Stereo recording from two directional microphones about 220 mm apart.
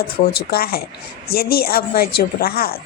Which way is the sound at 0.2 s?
35° left (ahead or behind).